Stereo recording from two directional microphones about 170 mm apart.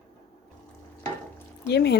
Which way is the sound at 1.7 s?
75° left (ahead or behind).